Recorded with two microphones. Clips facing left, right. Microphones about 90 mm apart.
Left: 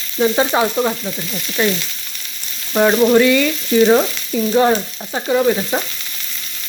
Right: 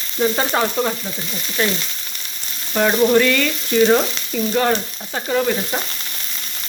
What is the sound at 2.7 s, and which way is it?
Frying, 15° left (ahead or behind).